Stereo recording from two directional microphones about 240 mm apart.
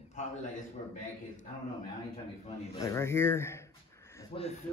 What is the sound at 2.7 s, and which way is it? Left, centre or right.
Speech, centre.